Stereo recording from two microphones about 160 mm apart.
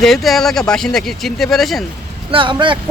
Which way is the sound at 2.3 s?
30° right (ahead or behind).